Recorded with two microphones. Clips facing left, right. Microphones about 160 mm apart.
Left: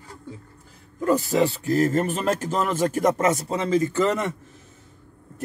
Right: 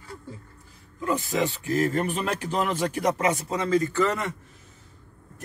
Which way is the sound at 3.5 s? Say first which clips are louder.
Left 2 dB; 25° left (ahead or behind).